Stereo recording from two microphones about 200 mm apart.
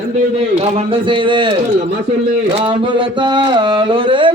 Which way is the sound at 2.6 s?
25° right (ahead or behind).